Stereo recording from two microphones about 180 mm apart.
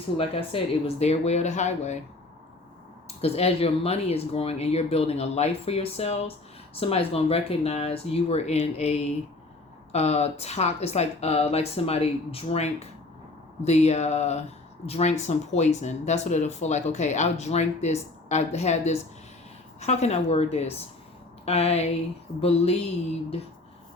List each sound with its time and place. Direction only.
0.2 s speech: 30° left (ahead or behind)
3.2 s speech: 35° left (ahead or behind)